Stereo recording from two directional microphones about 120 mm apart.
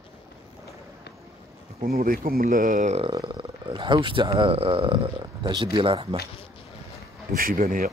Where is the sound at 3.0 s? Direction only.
45° right (ahead or behind).